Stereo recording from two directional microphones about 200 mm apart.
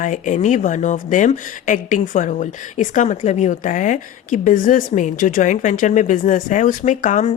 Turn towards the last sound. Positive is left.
turn(degrees=40)  # may be behind; listen again after turning